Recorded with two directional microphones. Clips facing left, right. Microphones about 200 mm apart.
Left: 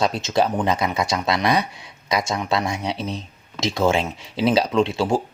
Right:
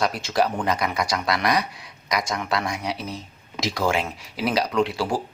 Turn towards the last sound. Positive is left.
turn(degrees=25)  # may be behind; listen again after turning